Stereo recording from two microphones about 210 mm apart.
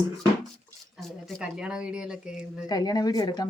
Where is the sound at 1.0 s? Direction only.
Centre (ahead or behind).